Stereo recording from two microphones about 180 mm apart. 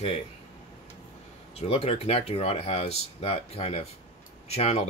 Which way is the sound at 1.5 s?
35° left (ahead or behind).